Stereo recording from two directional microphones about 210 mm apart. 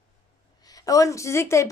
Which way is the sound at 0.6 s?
15° left (ahead or behind).